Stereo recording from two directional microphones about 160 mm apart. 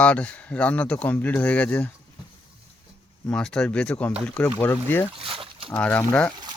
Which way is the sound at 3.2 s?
5° left (ahead or behind).